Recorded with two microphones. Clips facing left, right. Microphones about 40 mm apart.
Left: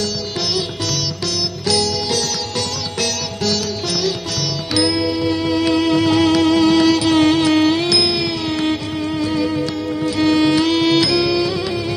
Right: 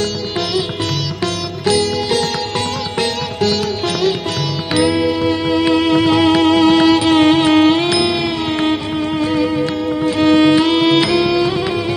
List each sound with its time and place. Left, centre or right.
1.2 s music: right
5.5 s music: right
10.2 s music: right